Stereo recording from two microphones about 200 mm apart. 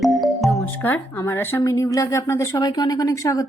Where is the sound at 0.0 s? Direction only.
Centre (ahead or behind).